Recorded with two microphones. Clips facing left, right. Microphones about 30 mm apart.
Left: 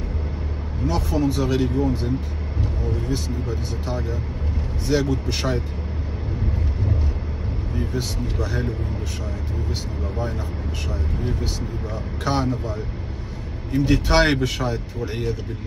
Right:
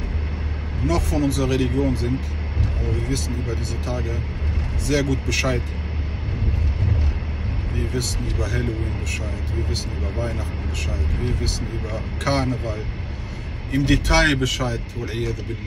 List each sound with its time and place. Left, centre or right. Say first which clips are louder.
0.8 s speech: right 1 dB; right
4.8 s speech: even; right
11.4 s speech: right 1 dB; right
13.7 s speech: even; right
14.6 s speech: even; centre